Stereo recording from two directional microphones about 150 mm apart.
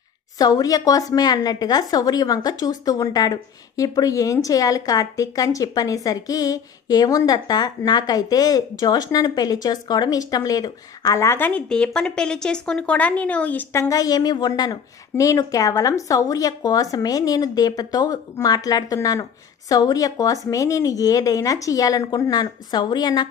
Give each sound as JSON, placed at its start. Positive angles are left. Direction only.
{"t": 0.4, "sound": "a woman's voice", "side_deg": 25}
{"t": 13.8, "sound": "a woman's voice", "side_deg": 25}